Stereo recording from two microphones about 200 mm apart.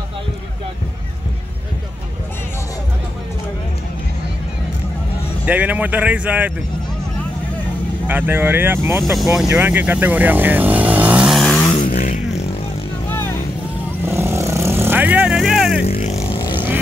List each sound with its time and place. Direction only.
5.4 s speech: 5° right (ahead or behind)
8.1 s speech: 10° right (ahead or behind)
9.0 s speech: centre (ahead or behind)
11.8 s a sound: 45° left (ahead or behind)
13.1 s vehicle: 10° left (ahead or behind)
14.0 s vehicle: 15° right (ahead or behind)
15.9 s vehicle: 30° left (ahead or behind)
16.5 s vehicle: 10° right (ahead or behind)